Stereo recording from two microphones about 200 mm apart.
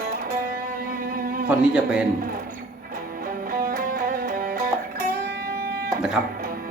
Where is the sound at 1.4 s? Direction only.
5° right (ahead or behind).